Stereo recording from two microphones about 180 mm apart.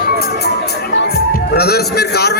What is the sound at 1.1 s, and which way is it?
A man's voice, 60° left (ahead or behind).